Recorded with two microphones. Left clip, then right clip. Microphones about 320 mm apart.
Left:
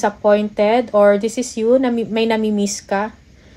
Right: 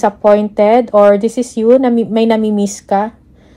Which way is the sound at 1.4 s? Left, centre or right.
Centre.